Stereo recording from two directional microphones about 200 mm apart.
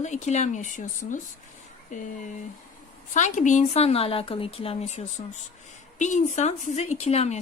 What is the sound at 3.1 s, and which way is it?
Speech, 40° left (ahead or behind).